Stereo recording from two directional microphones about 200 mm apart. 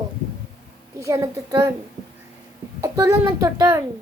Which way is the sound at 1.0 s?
15° right (ahead or behind).